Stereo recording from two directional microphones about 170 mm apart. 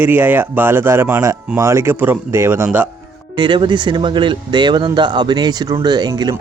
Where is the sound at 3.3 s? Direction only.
25° right (ahead or behind).